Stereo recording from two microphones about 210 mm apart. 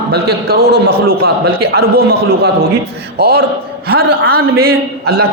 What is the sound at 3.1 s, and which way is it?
Speech, 50° right (ahead or behind).